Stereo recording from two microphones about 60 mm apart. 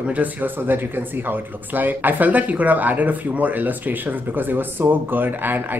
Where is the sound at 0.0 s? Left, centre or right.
Right.